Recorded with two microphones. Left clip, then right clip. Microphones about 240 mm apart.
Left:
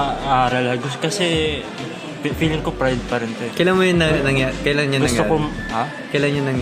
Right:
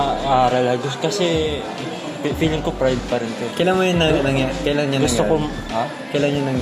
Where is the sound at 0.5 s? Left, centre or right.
Left.